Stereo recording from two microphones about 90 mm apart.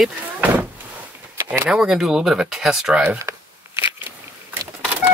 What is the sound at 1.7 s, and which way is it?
Speech, 10° right (ahead or behind).